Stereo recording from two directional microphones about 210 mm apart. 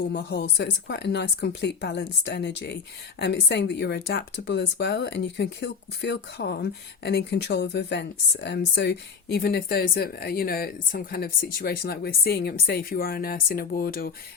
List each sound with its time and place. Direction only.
0.1 s speech: 50° left (ahead or behind)